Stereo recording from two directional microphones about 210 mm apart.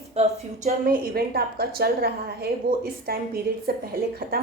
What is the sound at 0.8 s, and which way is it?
A woman's voice, 45° right (ahead or behind).